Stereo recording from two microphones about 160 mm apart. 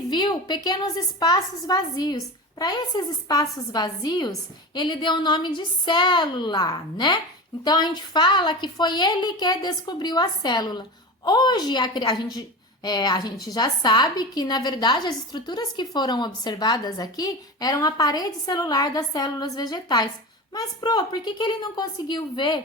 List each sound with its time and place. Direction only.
0.1 s a woman's voice: 25° left (ahead or behind)